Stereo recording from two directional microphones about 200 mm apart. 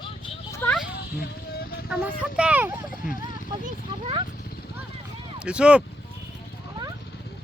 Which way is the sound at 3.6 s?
30° right (ahead or behind).